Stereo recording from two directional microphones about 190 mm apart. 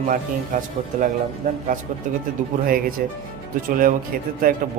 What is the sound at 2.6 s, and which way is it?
Speech, 50° right (ahead or behind).